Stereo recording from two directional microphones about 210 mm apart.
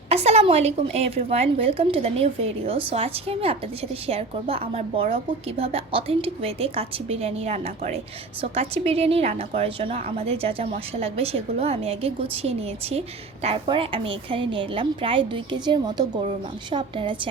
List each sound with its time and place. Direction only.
0.1 s a woman's voice: 30° right (ahead or behind)